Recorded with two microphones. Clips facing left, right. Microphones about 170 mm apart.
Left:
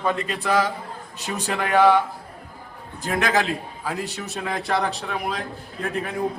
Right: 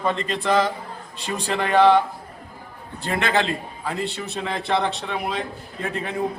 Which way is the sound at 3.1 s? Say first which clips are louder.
Even; centre (ahead or behind).